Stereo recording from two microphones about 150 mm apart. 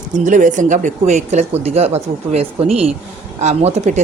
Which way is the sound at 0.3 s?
60° right (ahead or behind).